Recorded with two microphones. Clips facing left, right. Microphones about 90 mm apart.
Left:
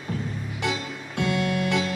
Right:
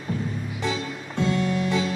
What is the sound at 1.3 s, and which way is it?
Music, 70° left (ahead or behind).